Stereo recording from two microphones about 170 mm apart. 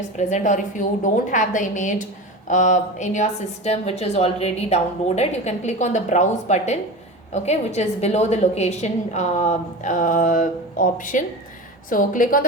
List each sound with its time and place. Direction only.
0.2 s a woman's voice: 45° left (ahead or behind)